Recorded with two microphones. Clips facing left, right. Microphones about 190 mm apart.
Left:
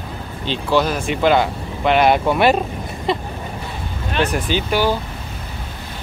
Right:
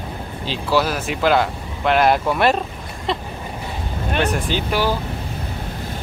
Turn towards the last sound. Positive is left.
turn(degrees=0)  # may be behind; listen again after turning